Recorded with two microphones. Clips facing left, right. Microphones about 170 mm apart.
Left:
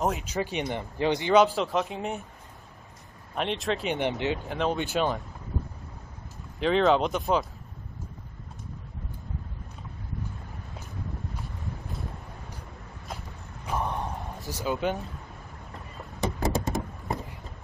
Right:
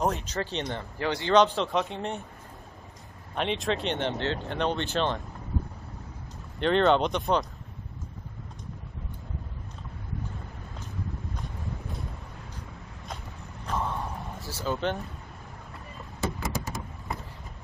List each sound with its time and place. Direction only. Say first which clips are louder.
0.0 s speech: left 1 dB; 10° left (ahead or behind)
1.4 s speech: left 1 dB; 5° left (ahead or behind)
3.3 s speech: even; centre (ahead or behind)
4.5 s speech: left 1 dB; 5° left (ahead or behind)
6.6 s speech: even; centre (ahead or behind)
13.7 s a sound: left 1 dB; 15° left (ahead or behind)
16.3 s a sound: left 6 dB; 35° left (ahead or behind)